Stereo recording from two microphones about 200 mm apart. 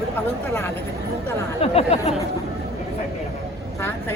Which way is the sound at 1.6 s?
30° left (ahead or behind).